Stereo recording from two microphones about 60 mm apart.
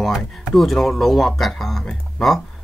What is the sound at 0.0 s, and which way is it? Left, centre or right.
Speech, centre.